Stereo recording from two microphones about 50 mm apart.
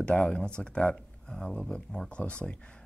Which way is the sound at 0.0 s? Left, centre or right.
Left.